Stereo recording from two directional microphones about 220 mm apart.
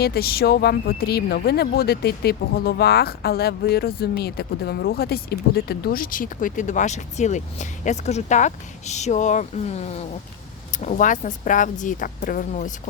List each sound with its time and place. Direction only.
0.0 s speech: 45° left (ahead or behind)